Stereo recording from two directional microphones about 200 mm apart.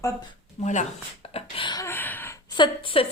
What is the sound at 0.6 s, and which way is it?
Speech, 35° left (ahead or behind).